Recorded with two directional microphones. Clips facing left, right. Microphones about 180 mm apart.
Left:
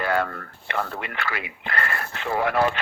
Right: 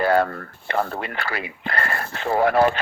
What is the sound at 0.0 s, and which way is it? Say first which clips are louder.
Speech: right 5 dB; 35° right (ahead or behind).